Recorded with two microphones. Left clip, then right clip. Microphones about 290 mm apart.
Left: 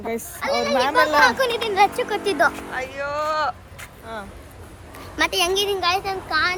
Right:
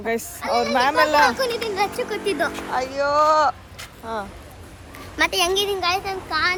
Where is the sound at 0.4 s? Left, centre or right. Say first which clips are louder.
Right 1 dB; centre.